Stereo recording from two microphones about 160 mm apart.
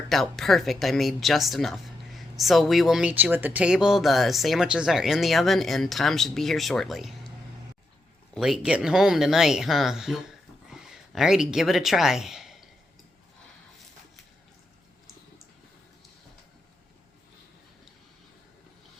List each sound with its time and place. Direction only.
0.1 s speech: centre (ahead or behind)
8.4 s speech: centre (ahead or behind)